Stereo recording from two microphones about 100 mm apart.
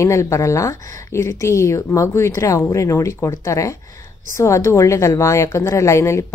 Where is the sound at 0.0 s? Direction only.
30° left (ahead or behind).